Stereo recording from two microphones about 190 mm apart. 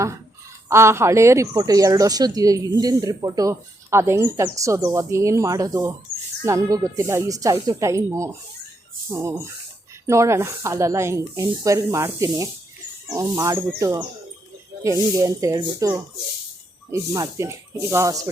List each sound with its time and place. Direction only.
0.7 s speech: 15° right (ahead or behind)